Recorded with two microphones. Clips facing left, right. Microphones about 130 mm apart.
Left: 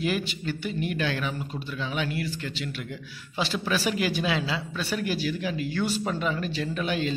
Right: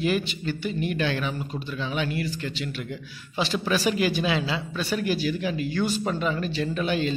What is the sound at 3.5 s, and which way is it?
Speech, 15° right (ahead or behind).